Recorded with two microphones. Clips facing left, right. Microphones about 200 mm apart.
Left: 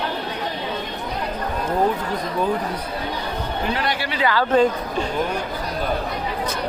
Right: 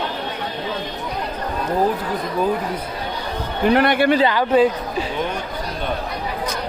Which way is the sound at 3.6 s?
55° right (ahead or behind).